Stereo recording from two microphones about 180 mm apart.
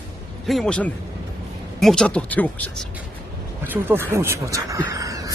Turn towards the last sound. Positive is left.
turn(degrees=-20)  # may be behind; listen again after turning